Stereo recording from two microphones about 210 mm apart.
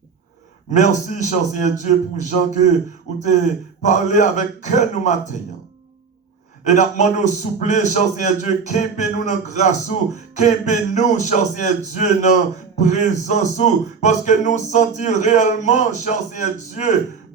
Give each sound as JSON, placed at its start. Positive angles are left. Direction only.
{"t": 0.7, "sound": "a man's voice", "side_deg": 35}
{"t": 3.8, "sound": "a man's voice", "side_deg": 35}
{"t": 6.7, "sound": "a man's voice", "side_deg": 35}